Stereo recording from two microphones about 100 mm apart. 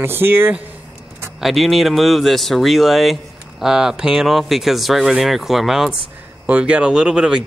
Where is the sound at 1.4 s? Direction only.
Centre (ahead or behind).